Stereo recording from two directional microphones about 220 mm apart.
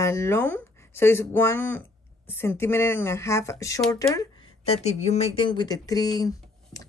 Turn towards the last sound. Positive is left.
turn(degrees=15)  # may be behind; listen again after turning